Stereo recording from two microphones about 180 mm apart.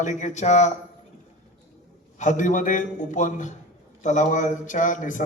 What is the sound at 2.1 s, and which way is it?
A man's voice, 45° left (ahead or behind).